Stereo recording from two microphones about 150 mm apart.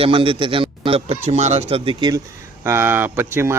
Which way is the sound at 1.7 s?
35° right (ahead or behind).